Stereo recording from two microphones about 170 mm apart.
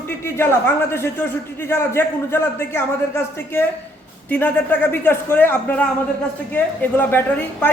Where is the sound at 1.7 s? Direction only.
15° left (ahead or behind).